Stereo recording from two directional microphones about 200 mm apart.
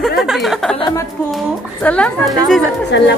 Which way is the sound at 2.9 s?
60° left (ahead or behind).